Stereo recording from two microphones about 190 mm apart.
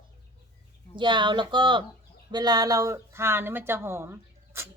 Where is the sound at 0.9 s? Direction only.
25° right (ahead or behind).